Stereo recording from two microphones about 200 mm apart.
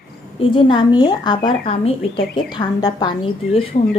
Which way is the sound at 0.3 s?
25° left (ahead or behind).